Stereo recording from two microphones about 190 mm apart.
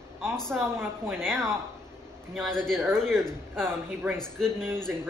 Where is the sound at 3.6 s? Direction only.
10° right (ahead or behind).